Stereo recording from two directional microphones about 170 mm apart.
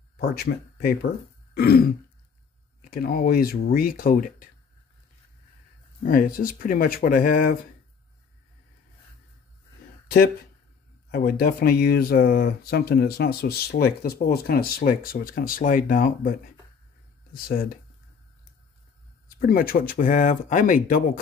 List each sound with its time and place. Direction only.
0.2 s speech: 65° left (ahead or behind)
6.0 s speech: 55° left (ahead or behind)
11.1 s speech: 60° left (ahead or behind)
19.3 s speech: 60° left (ahead or behind)